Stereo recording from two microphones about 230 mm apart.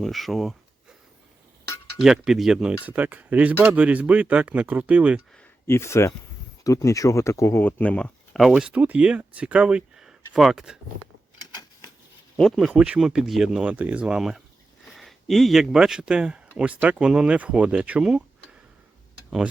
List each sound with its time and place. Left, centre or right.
0.0 s speech: centre
2.0 s speech: centre
5.4 s speech: centre
11.3 s a sound: centre
12.4 s speech: centre